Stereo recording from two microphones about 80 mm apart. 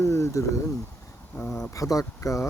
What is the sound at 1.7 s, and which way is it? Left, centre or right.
Speech, left.